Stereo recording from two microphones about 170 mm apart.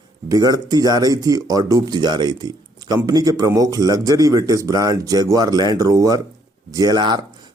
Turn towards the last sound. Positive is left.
turn(degrees=-25)  # may be behind; listen again after turning